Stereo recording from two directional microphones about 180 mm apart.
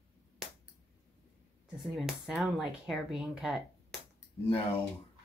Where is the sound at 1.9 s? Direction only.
Centre (ahead or behind).